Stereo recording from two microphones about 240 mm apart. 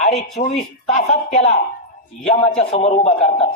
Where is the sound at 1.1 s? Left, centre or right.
Left.